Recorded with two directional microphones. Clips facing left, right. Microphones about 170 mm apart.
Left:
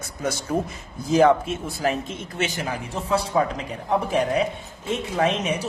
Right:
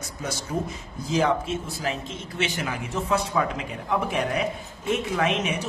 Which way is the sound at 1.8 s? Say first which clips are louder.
Left 6 dB; 55° left (ahead or behind).